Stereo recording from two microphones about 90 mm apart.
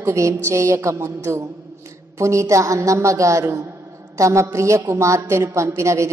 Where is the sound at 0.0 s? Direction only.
35° right (ahead or behind).